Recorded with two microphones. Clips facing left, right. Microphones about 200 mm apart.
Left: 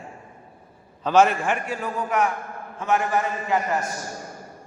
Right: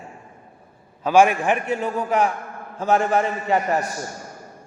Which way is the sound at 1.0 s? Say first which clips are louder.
Right 2 dB; 10° right (ahead or behind).